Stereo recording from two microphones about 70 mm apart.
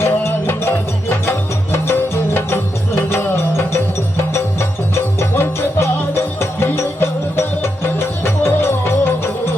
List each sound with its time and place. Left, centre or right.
0.0 s music: left
5.2 s music: left